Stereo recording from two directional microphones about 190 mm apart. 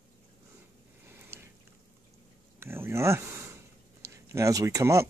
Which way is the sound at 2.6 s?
10° right (ahead or behind).